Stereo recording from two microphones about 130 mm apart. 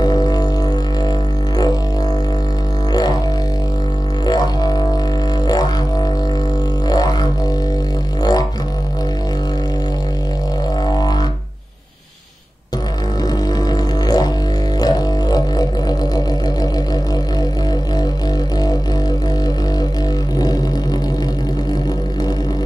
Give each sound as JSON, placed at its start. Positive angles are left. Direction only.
{"t": 0.0, "sound": "music", "side_deg": 30}
{"t": 4.3, "sound": "music", "side_deg": 30}
{"t": 13.5, "sound": "music", "side_deg": 30}